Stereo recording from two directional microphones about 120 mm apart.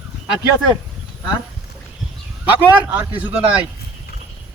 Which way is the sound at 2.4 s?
15° right (ahead or behind).